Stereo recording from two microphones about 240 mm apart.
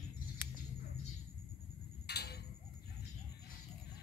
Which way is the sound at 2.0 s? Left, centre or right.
Left.